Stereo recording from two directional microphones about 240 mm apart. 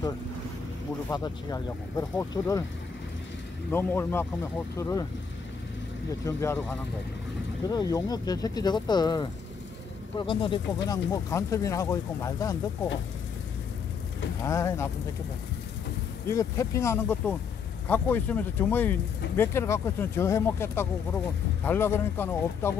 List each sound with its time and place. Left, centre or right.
1.0 s speech: centre
3.7 s speech: centre
6.2 s speech: centre
7.6 s speech: centre
14.4 s speech: centre
16.3 s speech: centre